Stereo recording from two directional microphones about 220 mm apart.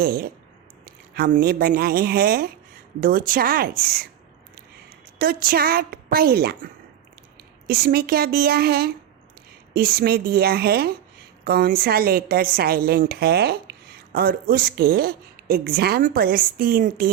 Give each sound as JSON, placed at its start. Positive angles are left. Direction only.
{"t": 0.0, "sound": "a woman's voice", "side_deg": -45}
{"t": 5.2, "sound": "a woman's voice", "side_deg": -40}
{"t": 7.7, "sound": "a woman's voice", "side_deg": -45}